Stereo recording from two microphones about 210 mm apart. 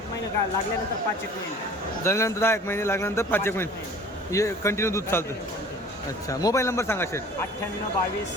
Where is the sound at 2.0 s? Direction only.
15° left (ahead or behind).